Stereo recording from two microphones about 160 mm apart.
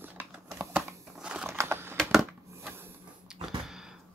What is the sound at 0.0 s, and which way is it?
Typing, 10° right (ahead or behind).